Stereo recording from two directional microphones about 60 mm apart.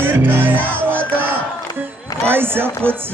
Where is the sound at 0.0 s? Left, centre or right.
Right.